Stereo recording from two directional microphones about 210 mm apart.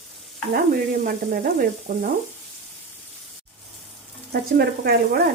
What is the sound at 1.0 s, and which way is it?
Frying, 40° right (ahead or behind).